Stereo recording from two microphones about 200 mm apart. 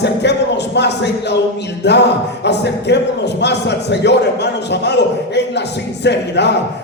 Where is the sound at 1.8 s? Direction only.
60° left (ahead or behind).